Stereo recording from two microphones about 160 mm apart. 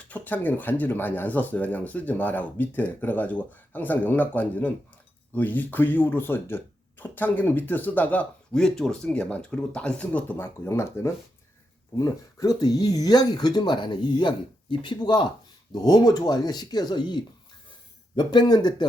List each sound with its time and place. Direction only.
0.1 s speech: 10° left (ahead or behind)